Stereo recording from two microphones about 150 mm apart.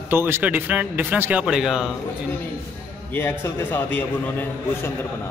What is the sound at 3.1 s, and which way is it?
A man's voice, 15° left (ahead or behind).